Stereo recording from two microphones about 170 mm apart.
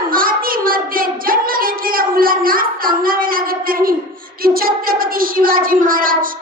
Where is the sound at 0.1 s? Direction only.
55° right (ahead or behind).